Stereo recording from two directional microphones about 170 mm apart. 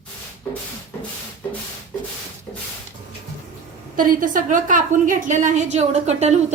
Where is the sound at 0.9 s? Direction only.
15° left (ahead or behind).